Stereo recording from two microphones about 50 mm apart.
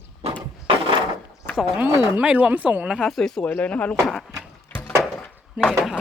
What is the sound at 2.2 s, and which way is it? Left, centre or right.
Speech, right.